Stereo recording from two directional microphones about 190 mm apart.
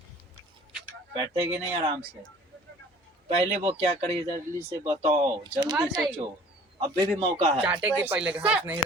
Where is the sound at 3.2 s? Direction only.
35° right (ahead or behind).